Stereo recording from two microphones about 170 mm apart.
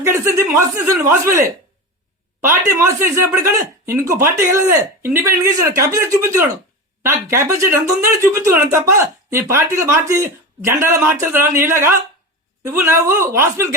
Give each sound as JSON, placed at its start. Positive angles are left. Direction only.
{"t": 0.0, "sound": "speech", "side_deg": -15}